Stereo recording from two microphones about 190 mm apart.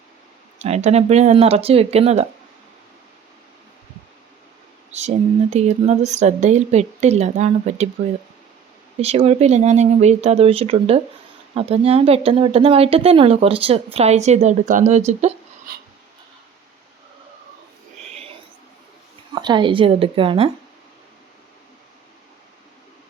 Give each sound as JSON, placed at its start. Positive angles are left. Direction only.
{"t": 0.6, "sound": "speech", "side_deg": -35}
{"t": 4.9, "sound": "speech", "side_deg": -35}
{"t": 9.0, "sound": "speech", "side_deg": -30}
{"t": 19.3, "sound": "speech", "side_deg": -25}